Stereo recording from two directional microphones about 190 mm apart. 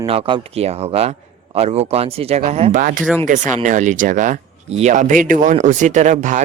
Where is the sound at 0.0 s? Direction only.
30° right (ahead or behind).